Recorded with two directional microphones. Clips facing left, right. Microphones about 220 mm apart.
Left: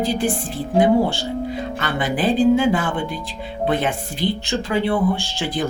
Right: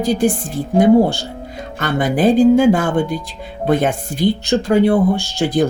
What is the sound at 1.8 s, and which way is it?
Speech, 45° right (ahead or behind).